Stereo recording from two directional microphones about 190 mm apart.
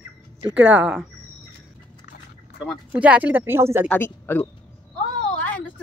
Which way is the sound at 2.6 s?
5° right (ahead or behind).